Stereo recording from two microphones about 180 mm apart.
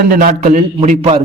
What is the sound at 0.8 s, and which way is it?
Speech, 35° right (ahead or behind).